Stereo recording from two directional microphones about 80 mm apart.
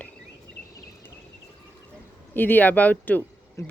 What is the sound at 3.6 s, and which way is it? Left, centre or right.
Speech, left.